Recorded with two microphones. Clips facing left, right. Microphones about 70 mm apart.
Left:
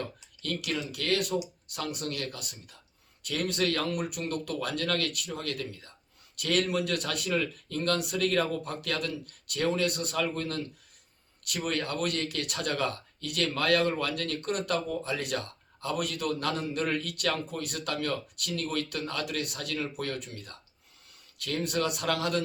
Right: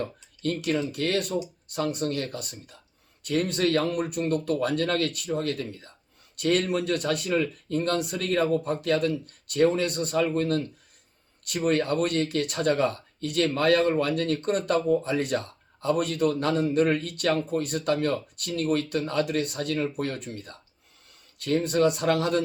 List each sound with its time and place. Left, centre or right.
0.0 s speech: right